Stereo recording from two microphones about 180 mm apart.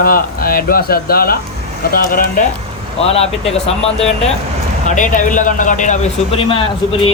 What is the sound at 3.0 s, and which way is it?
Speech, 35° left (ahead or behind).